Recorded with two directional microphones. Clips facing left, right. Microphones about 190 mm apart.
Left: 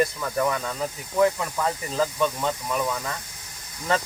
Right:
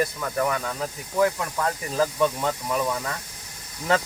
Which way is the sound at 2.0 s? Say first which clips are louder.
Right 2 dB; 10° right (ahead or behind).